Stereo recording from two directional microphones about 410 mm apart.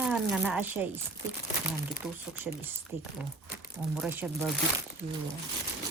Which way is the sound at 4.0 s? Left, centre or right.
Centre.